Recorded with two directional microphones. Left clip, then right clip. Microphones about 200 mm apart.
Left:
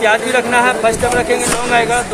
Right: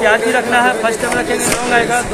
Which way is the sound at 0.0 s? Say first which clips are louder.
Even; 55° left (ahead or behind).